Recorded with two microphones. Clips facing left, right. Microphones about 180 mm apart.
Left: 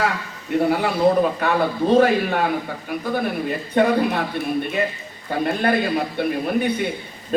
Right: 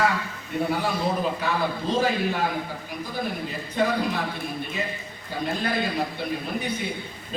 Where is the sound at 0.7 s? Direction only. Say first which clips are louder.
Left 8 dB; 60° left (ahead or behind).